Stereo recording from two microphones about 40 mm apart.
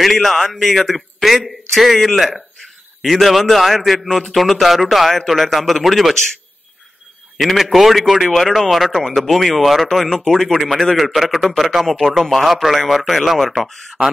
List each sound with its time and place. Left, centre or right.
0.0 s speech: centre
7.3 s speech: centre
9.8 s speech: centre
13.7 s speech: centre